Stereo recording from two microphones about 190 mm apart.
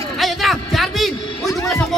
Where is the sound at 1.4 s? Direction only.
15° left (ahead or behind).